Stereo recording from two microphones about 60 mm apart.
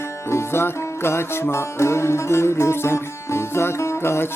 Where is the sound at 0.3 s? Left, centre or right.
Left.